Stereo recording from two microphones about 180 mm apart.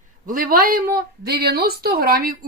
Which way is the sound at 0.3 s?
50° right (ahead or behind).